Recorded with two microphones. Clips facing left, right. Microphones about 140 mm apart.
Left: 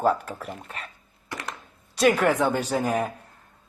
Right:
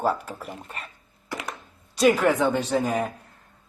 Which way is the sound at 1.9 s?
Centre (ahead or behind).